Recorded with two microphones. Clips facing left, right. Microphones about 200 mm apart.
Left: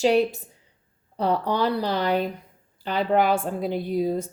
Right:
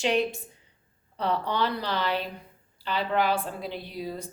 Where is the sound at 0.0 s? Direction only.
40° left (ahead or behind).